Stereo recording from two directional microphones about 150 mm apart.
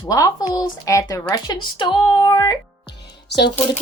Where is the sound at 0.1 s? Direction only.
25° left (ahead or behind).